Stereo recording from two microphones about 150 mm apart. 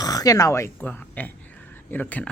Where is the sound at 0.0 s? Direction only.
25° left (ahead or behind).